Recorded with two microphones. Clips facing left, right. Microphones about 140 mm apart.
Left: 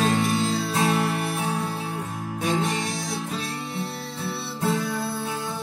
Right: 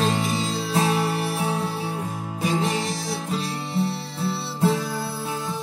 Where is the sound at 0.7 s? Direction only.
25° right (ahead or behind).